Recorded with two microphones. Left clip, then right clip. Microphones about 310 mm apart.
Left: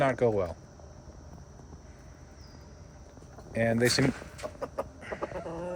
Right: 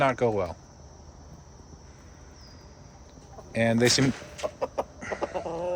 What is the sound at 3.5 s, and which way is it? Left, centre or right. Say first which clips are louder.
Speech: right 3 dB; centre.